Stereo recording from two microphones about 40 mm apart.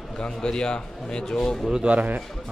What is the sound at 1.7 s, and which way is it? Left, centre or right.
Speech, right.